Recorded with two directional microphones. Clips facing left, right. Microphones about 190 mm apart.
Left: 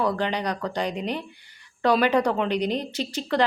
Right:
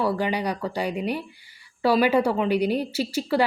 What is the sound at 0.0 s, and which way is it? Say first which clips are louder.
Speech: right 1 dB; 10° right (ahead or behind).